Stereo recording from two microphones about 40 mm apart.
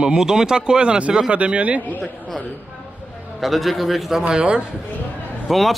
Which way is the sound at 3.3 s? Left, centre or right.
Centre.